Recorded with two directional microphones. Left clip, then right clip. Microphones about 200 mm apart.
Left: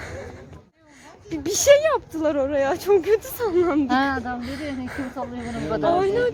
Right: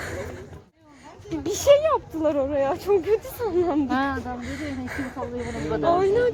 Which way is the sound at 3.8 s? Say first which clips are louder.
Left 3 dB; 55° left (ahead or behind).